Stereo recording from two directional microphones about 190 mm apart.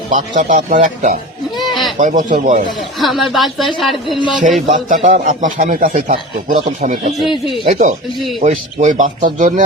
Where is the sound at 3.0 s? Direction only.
Centre (ahead or behind).